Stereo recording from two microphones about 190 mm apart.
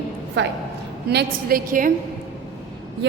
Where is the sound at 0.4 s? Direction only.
65° right (ahead or behind).